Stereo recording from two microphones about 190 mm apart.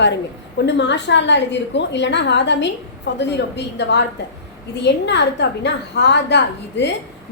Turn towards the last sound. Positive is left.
turn(degrees=65)  # may be behind; listen again after turning